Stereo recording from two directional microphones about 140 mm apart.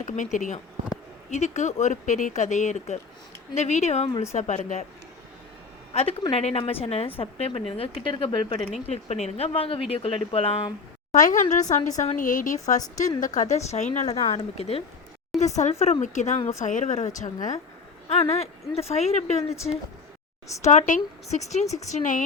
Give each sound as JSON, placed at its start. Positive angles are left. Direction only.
{"t": 0.0, "sound": "speech", "side_deg": 65}
{"t": 5.9, "sound": "a woman's voice", "side_deg": 45}
{"t": 8.9, "sound": "speech", "side_deg": 50}
{"t": 11.1, "sound": "a woman's voice", "side_deg": 65}
{"t": 15.4, "sound": "speech", "side_deg": 55}
{"t": 18.1, "sound": "speech", "side_deg": 50}
{"t": 20.6, "sound": "speech", "side_deg": 60}